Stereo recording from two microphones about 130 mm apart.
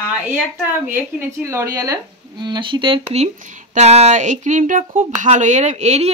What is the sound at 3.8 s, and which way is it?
Speech, 55° right (ahead or behind).